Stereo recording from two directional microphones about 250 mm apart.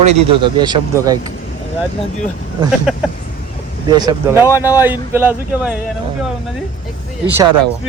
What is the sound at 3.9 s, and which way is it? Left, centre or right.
Speech, centre.